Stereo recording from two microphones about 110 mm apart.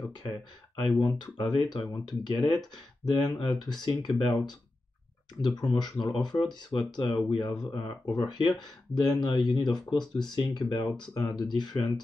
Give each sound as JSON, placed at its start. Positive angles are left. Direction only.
{"t": 0.2, "sound": "speech", "side_deg": 40}